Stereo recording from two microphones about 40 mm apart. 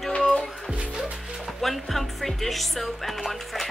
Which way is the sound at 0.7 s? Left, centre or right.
Centre.